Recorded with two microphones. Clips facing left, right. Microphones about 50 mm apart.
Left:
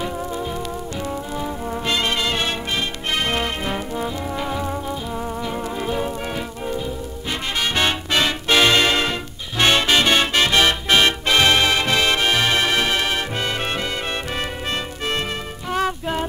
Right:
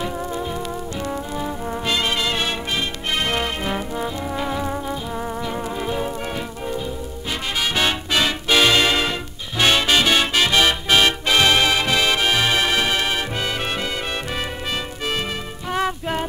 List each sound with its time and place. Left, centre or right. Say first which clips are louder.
1.4 s music: even; centre
3.3 s brass instrument: even; centre
5.5 s music: left 1 dB; centre
7.7 s music: left 1 dB; centre
15.7 s music: even; centre